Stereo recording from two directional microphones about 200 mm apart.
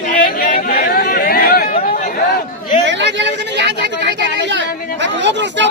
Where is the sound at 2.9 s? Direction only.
65° right (ahead or behind).